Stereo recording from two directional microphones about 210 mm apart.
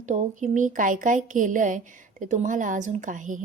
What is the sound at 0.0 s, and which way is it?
A woman's voice, 35° right (ahead or behind).